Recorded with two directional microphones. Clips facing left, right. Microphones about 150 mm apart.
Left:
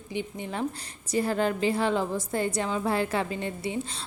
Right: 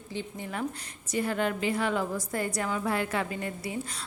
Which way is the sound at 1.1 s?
35° left (ahead or behind).